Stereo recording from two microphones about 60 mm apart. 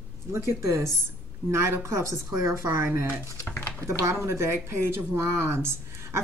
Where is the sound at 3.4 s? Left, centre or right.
Left.